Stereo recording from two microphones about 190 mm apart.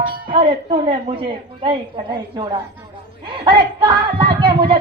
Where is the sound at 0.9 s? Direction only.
25° right (ahead or behind).